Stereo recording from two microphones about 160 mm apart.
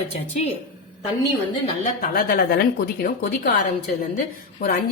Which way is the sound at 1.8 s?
60° left (ahead or behind).